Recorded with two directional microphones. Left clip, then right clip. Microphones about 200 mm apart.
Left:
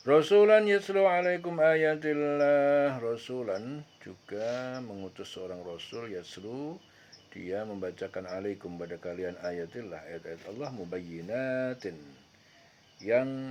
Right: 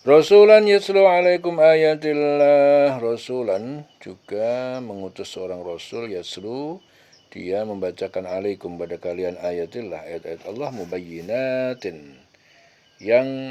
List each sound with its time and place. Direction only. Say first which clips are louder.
0.0 s speech: right 10 dB; 35° right (ahead or behind)
13.1 s speech: right 10 dB; 35° right (ahead or behind)